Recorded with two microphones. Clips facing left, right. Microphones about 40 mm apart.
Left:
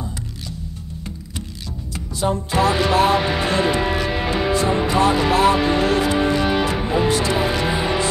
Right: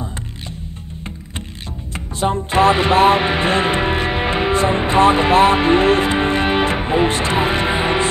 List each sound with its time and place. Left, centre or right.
2.0 s speech: right